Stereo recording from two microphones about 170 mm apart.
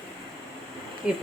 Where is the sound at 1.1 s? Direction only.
5° right (ahead or behind).